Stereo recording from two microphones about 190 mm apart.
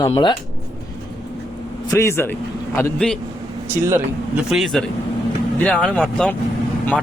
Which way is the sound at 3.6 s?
15° right (ahead or behind).